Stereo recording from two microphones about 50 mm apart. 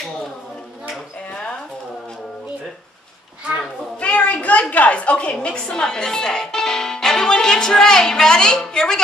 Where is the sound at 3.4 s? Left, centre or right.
Centre.